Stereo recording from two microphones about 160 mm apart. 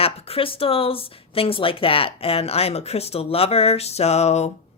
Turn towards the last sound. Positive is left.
turn(degrees=45)  # may be behind; listen again after turning